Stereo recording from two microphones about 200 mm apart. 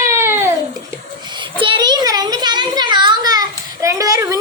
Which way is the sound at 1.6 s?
25° right (ahead or behind).